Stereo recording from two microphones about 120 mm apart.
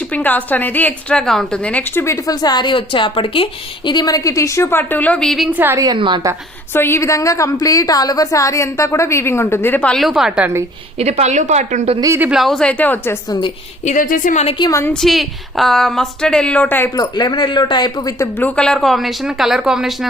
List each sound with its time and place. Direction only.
0.1 s a woman's voice: 15° left (ahead or behind)
5.5 s a woman's voice: 15° right (ahead or behind)
5.8 s a woman's voice: 40° right (ahead or behind)
6.7 s a woman's voice: 20° left (ahead or behind)
9.9 s a woman's voice: centre (ahead or behind)
10.9 s speech: 65° right (ahead or behind)
12.3 s a woman's voice: centre (ahead or behind)
13.2 s speech: 40° left (ahead or behind)
13.8 s a woman's voice: 85° left
14.7 s a woman's voice: 20° left (ahead or behind)
14.9 s a woman's voice: centre (ahead or behind)
16.9 s speech: 35° left (ahead or behind)
18.2 s a woman's voice: 15° left (ahead or behind); by 20.1 s centre (ahead or behind)